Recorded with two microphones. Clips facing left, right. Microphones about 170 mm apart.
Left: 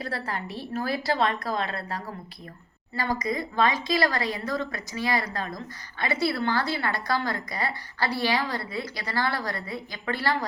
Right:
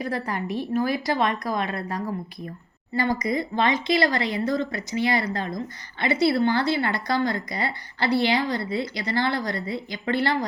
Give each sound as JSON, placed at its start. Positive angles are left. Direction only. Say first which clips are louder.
{"t": 0.0, "sound": "a woman's voice", "louder": "right 4 dB", "side_deg": -15}